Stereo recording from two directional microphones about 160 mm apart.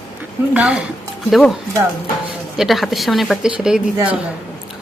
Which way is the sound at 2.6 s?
Centre (ahead or behind).